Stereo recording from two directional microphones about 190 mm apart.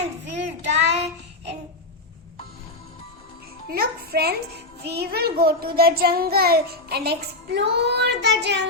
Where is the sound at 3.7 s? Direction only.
55° right (ahead or behind).